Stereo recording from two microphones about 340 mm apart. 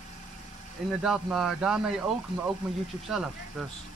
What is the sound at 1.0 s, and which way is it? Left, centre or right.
Speech, centre.